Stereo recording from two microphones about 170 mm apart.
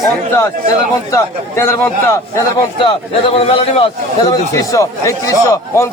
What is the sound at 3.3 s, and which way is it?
Speech, 35° left (ahead or behind).